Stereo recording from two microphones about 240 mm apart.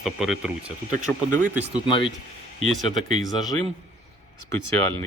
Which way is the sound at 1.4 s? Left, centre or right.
Centre.